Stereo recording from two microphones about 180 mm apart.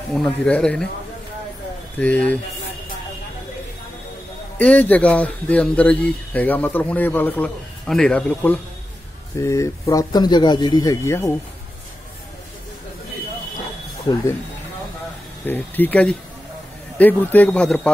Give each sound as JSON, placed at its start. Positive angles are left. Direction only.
{"t": 0.1, "sound": "speech", "side_deg": 5}
{"t": 2.0, "sound": "speech", "side_deg": 5}
{"t": 4.6, "sound": "speech", "side_deg": 10}
{"t": 15.4, "sound": "speech", "side_deg": 10}